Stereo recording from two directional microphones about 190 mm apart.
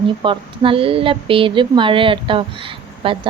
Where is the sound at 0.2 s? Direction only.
25° right (ahead or behind).